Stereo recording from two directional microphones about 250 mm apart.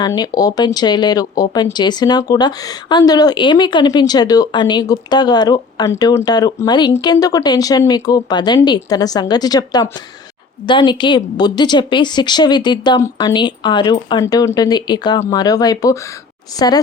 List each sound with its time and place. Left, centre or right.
0.0 s a woman's voice: centre